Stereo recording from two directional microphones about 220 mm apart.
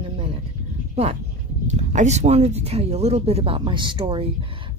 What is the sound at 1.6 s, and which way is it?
Speech, 35° right (ahead or behind).